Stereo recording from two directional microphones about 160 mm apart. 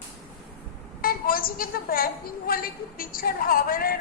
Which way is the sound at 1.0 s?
65° left (ahead or behind).